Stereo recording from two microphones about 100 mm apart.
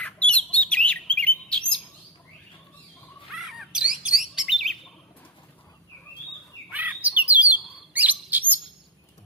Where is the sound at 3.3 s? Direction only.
Centre (ahead or behind).